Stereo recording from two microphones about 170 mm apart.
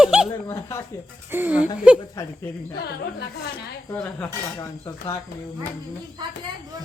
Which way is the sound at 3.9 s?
10° left (ahead or behind).